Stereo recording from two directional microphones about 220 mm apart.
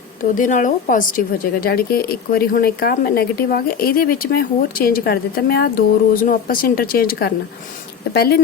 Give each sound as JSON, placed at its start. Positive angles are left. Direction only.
{"t": 0.3, "sound": "a woman's voice", "side_deg": 35}